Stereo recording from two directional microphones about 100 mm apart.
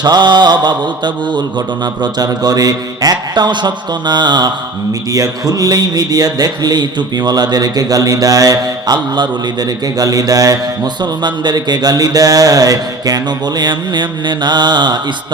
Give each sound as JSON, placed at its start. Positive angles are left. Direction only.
{"t": 0.0, "sound": "mantra", "side_deg": -45}
{"t": 5.1, "sound": "speech", "side_deg": -35}
{"t": 11.0, "sound": "mantra", "side_deg": -45}